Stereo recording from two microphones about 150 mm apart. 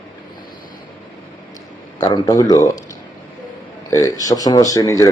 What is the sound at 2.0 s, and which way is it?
Speech, 25° left (ahead or behind).